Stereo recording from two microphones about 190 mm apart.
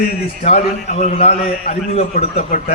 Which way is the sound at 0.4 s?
35° left (ahead or behind).